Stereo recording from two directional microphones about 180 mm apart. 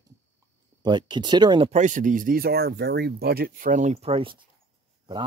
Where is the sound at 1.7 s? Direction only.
45° right (ahead or behind).